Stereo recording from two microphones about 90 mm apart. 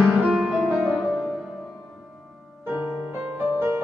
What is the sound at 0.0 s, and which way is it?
Music, centre (ahead or behind).